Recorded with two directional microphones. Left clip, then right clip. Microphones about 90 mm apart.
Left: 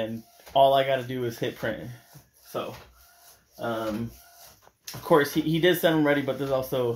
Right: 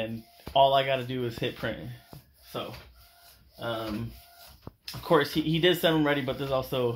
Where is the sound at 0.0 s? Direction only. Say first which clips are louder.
Left 3 dB; 15° left (ahead or behind).